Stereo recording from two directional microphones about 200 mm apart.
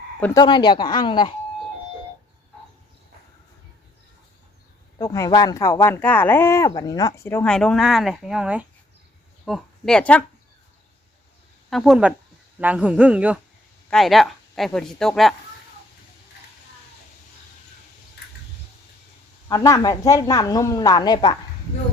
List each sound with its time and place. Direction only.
0.3 s speech: 20° left (ahead or behind)
4.9 s speech: 15° left (ahead or behind)
11.7 s a man's voice: centre (ahead or behind)
19.5 s speech: 15° left (ahead or behind)